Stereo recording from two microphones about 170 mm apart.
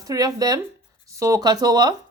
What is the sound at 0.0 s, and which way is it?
Speech, 20° right (ahead or behind).